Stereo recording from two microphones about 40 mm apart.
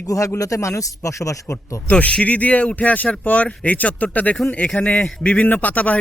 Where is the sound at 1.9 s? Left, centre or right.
Left.